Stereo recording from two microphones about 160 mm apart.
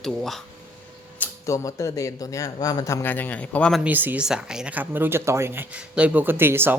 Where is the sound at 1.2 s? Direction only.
20° left (ahead or behind).